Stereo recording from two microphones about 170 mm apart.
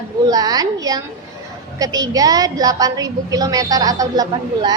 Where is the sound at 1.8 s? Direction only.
20° right (ahead or behind).